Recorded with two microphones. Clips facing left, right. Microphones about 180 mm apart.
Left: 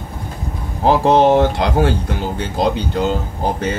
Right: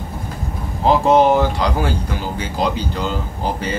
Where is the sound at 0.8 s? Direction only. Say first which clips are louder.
Left 1 dB; 70° left (ahead or behind).